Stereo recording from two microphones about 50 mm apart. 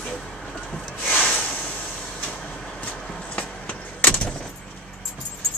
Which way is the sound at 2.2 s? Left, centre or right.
Left.